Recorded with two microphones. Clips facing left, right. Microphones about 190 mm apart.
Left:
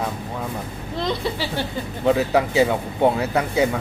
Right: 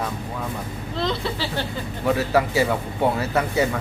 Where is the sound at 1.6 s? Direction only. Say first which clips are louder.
Left 3 dB; 15° left (ahead or behind).